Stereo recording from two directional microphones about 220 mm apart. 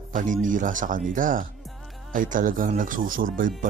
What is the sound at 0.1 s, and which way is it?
Speech, 35° right (ahead or behind).